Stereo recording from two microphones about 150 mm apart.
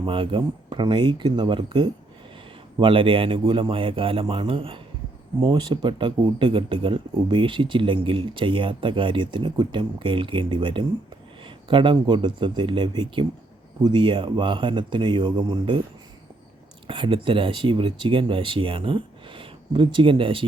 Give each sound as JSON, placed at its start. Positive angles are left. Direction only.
{"t": 0.0, "sound": "speech", "side_deg": -35}
{"t": 16.8, "sound": "speech", "side_deg": -35}